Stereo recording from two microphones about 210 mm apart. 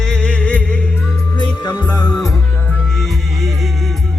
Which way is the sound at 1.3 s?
20° left (ahead or behind).